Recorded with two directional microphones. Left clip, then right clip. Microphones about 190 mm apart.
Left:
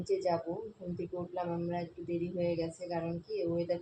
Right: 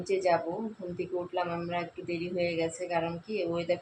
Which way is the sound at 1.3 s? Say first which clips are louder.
Right 4 dB; 45° right (ahead or behind).